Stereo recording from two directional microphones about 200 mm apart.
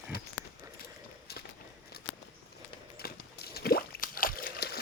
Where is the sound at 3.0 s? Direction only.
50° left (ahead or behind).